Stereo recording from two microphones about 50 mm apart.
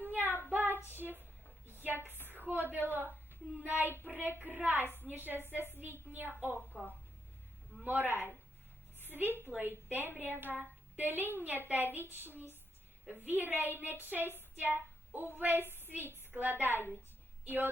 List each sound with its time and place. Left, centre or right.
0.0 s child singing: right
0.9 s a sound: right
2.2 s a woman's voice: right
7.9 s a woman's voice: right